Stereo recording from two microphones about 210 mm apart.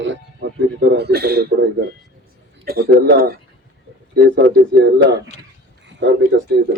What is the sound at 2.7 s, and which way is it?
A man's voice, 45° right (ahead or behind).